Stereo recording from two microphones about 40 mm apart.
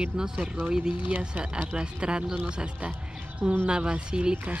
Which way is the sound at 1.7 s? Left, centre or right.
Right.